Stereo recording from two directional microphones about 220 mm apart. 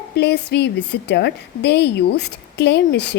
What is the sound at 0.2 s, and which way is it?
A woman's voice, 50° left (ahead or behind).